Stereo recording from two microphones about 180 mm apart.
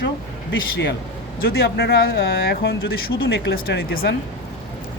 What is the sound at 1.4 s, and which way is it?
Speech, 60° left (ahead or behind).